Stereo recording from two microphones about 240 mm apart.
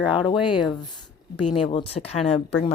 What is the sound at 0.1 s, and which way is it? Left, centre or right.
A woman's voice, left.